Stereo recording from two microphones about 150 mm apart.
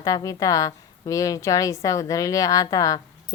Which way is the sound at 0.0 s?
25° left (ahead or behind).